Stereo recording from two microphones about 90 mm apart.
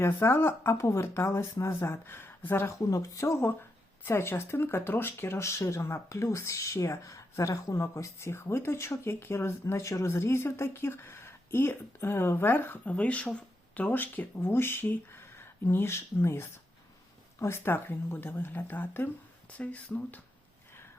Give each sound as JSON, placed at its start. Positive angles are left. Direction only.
{"t": 0.0, "sound": "speech", "side_deg": 25}
{"t": 2.9, "sound": "speech", "side_deg": 35}